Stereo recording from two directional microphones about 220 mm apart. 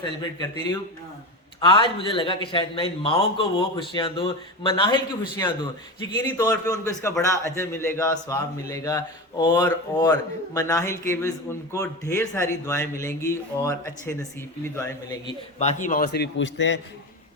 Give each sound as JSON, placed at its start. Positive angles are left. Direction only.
{"t": 1.6, "sound": "a man's voice", "side_deg": 25}
{"t": 15.5, "sound": "a man's voice", "side_deg": 30}
{"t": 16.1, "sound": "a man's voice", "side_deg": 50}